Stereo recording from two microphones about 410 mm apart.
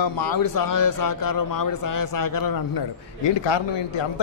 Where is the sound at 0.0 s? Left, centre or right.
Left.